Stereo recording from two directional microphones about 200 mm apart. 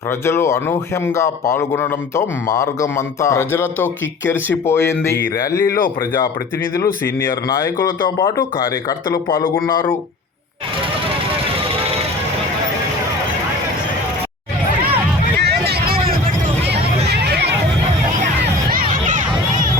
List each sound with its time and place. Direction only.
0.3 s a man's voice: 15° left (ahead or behind)
6.7 s a man's voice: 15° left (ahead or behind)
15.4 s vehicle: 55° right (ahead or behind)
17.1 s hubbub: 55° right (ahead or behind)
18.7 s crowd: 45° right (ahead or behind)